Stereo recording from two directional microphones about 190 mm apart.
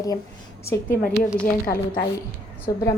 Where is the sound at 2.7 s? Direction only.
20° left (ahead or behind).